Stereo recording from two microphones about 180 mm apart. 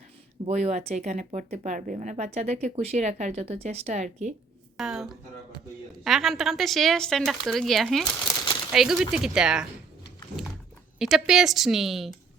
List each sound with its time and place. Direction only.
0.4 s speech: 40° right (ahead or behind)
4.8 s speech: centre (ahead or behind)
11.0 s speech: centre (ahead or behind)